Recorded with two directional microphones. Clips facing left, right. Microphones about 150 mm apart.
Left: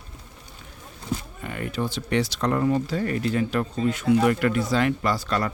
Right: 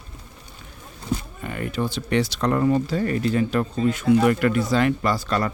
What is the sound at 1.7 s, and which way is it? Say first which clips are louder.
Speech: right 2 dB; 70° right (ahead or behind).